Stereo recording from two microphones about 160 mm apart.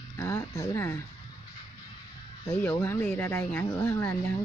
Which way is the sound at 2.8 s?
15° left (ahead or behind).